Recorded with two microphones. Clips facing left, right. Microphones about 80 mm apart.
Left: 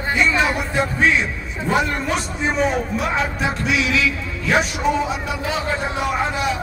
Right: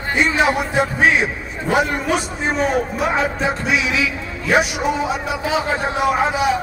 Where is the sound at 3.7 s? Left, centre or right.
Centre.